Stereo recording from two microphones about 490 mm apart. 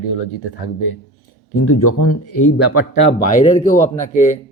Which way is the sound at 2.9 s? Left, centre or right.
Centre.